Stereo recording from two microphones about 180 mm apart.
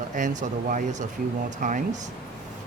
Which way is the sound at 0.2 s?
45° right (ahead or behind).